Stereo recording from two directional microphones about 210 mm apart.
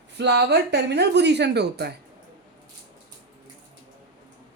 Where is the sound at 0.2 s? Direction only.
55° right (ahead or behind).